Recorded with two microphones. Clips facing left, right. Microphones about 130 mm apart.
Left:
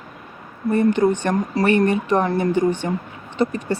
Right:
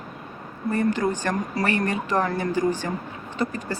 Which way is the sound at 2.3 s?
35° left (ahead or behind).